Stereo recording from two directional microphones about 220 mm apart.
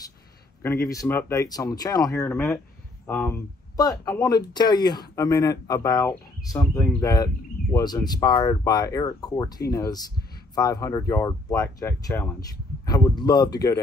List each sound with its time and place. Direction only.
0.6 s speech: 15° left (ahead or behind)